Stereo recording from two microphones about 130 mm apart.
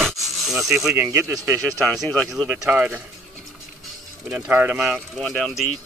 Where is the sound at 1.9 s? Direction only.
Centre (ahead or behind).